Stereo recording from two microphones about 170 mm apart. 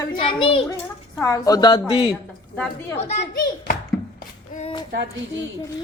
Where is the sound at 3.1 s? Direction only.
40° left (ahead or behind).